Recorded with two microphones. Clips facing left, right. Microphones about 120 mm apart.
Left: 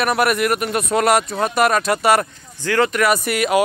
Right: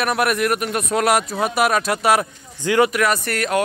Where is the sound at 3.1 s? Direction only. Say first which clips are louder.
Left 3 dB; 10° left (ahead or behind).